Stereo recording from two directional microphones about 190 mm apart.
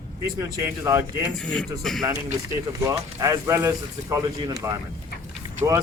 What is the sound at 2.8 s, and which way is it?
Speech, 15° right (ahead or behind).